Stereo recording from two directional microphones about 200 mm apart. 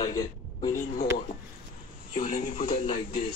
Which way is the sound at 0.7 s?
40° left (ahead or behind).